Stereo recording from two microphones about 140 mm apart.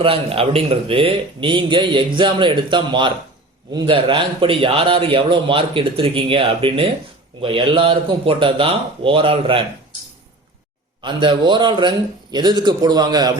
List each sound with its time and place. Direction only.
0.0 s a man's voice: 40° right (ahead or behind)
11.0 s a man's voice: 35° right (ahead or behind)